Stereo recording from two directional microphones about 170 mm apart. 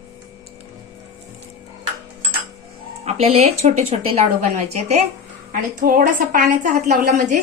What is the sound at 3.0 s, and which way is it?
A woman's voice, 40° right (ahead or behind).